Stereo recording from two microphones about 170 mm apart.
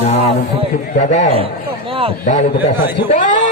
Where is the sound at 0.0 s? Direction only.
40° left (ahead or behind).